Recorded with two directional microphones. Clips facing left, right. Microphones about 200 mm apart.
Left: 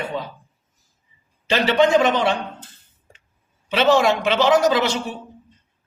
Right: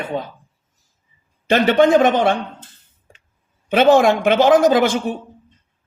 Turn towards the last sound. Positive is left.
turn(degrees=-50)  # may be behind; listen again after turning